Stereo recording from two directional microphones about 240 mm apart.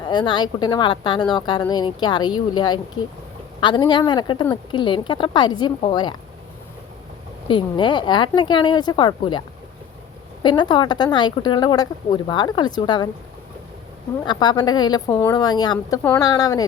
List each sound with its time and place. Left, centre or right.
0.0 s speech: centre
7.4 s speech: centre
10.4 s a woman's voice: centre
14.3 s a woman's voice: centre